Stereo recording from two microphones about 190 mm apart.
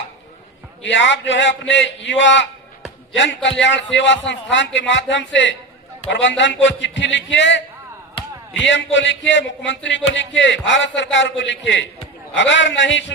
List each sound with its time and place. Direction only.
0.8 s a man's voice: 75° left (ahead or behind)